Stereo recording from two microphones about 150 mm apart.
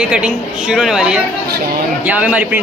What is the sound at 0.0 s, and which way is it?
A woman's voice, 5° right (ahead or behind).